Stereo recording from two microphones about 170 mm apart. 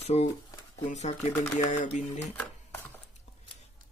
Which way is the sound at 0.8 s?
40° left (ahead or behind).